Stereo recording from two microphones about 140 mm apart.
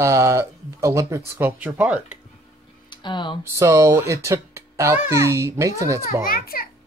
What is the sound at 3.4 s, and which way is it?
Speech, 20° right (ahead or behind).